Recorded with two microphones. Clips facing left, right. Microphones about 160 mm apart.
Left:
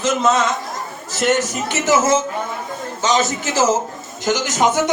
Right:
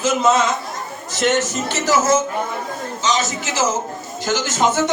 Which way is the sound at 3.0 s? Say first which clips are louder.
Left 3 dB; 50° left (ahead or behind).